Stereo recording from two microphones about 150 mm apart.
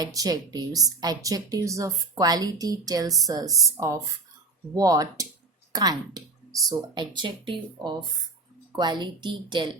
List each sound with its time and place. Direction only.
0.0 s speech: 25° right (ahead or behind)